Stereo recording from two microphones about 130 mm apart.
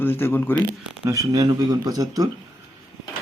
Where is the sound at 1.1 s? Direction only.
25° right (ahead or behind).